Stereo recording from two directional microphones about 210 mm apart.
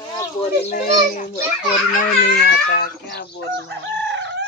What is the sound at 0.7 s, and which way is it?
Speech, 45° left (ahead or behind).